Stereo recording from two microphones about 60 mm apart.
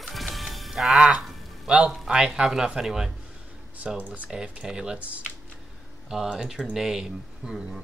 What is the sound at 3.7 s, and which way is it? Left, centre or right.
Speech, right.